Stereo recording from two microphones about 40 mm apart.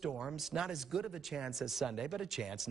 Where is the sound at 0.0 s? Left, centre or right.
Centre.